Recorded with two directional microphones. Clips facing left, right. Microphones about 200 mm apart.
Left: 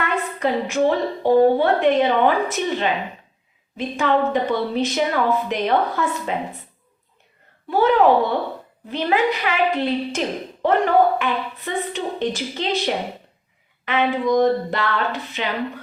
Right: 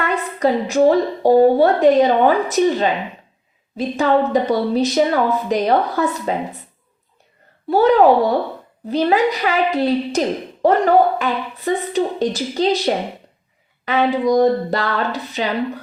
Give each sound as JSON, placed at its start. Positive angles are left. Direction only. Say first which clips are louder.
{"t": 0.3, "sound": "speech", "louder": "right 6 dB", "side_deg": -40}
{"t": 3.8, "sound": "speech", "louder": "right 4 dB", "side_deg": -35}
{"t": 7.7, "sound": "speech", "louder": "right 3 dB", "side_deg": -40}